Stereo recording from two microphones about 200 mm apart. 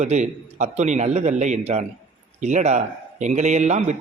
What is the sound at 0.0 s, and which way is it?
Speech, 35° right (ahead or behind).